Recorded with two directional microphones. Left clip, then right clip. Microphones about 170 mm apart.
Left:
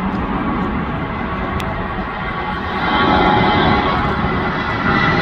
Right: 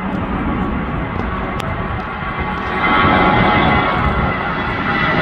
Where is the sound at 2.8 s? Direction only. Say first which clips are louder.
Right 1 dB; 25° right (ahead or behind).